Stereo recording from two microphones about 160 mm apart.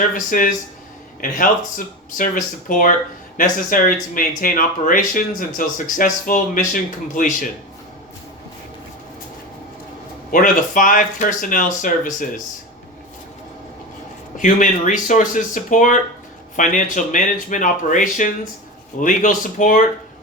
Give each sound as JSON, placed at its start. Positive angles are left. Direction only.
{"t": 0.3, "sound": "speech", "side_deg": 55}
{"t": 10.3, "sound": "speech", "side_deg": 55}
{"t": 14.3, "sound": "speech", "side_deg": 55}